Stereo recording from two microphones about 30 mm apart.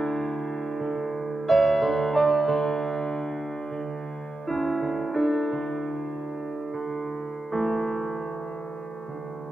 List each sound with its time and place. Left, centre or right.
0.0 s music: centre
2.5 s music: centre
4.5 s music: centre
6.8 s music: centre